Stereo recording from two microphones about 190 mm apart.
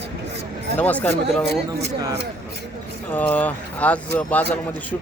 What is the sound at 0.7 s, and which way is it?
Speech, 10° left (ahead or behind).